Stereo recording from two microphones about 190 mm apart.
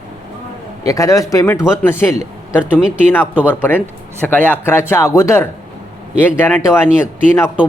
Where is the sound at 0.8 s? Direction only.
15° left (ahead or behind).